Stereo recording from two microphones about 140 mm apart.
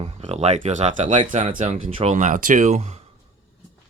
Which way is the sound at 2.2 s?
70° right (ahead or behind).